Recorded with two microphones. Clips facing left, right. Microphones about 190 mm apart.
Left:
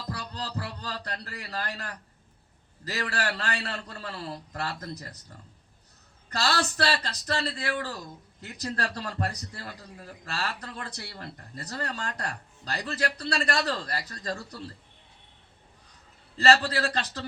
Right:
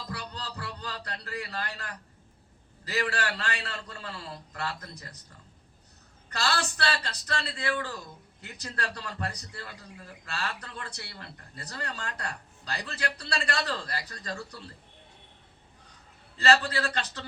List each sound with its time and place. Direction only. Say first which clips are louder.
0.1 s music: left 6 dB; 35° left (ahead or behind)
2.9 s speech: right 1 dB; 35° left (ahead or behind)
6.3 s speech: left 3 dB; 35° left (ahead or behind)
16.4 s speech: left 2 dB; 35° left (ahead or behind)